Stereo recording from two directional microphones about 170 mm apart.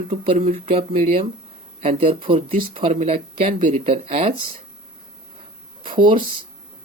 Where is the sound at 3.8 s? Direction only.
35° right (ahead or behind).